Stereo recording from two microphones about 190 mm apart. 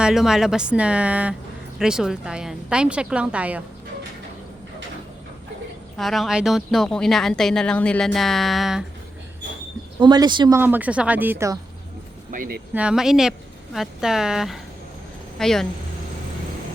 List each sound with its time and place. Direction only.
0.0 s speech: centre (ahead or behind)
6.0 s speech: centre (ahead or behind)
10.0 s speech: 25° right (ahead or behind)
10.6 s speech: 10° right (ahead or behind)
12.3 s speech: 50° right (ahead or behind)
12.7 s speech: 5° right (ahead or behind)